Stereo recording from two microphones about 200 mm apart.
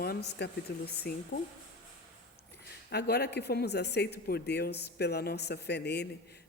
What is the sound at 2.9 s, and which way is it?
A woman's voice, 55° left (ahead or behind).